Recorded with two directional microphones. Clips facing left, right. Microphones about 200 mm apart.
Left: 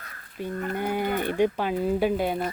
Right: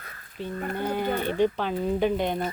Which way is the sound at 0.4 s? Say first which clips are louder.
Left 1 dB; 10° left (ahead or behind).